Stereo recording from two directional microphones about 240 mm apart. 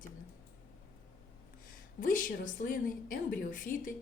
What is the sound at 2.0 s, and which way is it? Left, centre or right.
A woman's voice, left.